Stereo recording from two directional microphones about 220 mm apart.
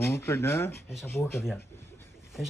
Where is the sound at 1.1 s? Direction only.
10° left (ahead or behind).